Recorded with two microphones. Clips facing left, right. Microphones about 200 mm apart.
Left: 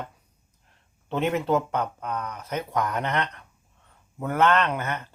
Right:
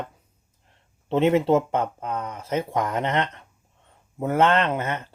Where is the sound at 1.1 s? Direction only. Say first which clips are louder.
Right 5 dB; 25° right (ahead or behind).